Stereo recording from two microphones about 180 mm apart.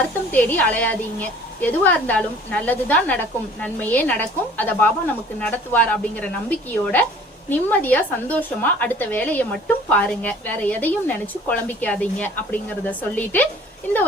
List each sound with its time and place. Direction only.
0.3 s a woman's voice: 10° left (ahead or behind)